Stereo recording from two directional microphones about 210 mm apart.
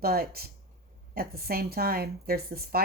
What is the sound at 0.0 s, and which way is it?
Speech, 45° right (ahead or behind).